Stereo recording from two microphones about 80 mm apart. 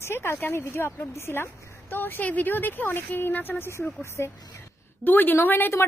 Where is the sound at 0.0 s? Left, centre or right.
Left.